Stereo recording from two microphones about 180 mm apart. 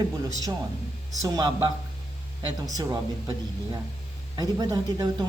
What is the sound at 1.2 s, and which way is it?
Speech, 20° right (ahead or behind).